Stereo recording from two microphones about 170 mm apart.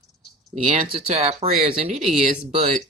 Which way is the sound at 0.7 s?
35° right (ahead or behind).